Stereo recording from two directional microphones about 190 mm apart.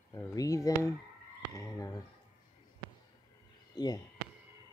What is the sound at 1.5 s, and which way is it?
Fowl, 20° left (ahead or behind).